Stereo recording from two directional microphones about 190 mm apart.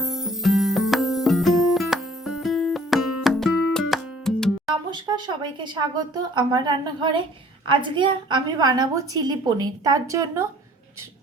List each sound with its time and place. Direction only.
0.0 s music: centre (ahead or behind)
4.9 s a woman's voice: 25° right (ahead or behind)